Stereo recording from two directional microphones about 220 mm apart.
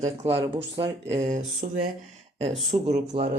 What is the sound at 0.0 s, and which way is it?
Speech, 25° right (ahead or behind).